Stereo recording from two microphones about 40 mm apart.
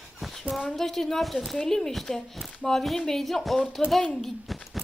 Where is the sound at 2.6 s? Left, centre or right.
Centre.